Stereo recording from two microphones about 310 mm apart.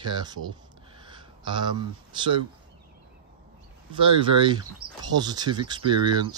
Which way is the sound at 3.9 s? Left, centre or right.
Centre.